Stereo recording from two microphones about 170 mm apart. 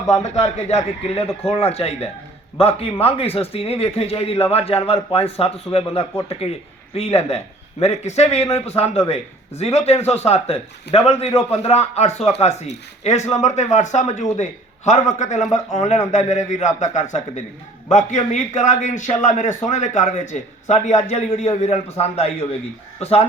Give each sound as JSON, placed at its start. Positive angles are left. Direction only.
{"t": 0.1, "sound": "a man's voice", "side_deg": 40}